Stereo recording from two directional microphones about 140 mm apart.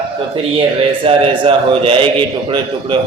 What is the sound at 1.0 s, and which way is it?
Speech, 40° right (ahead or behind).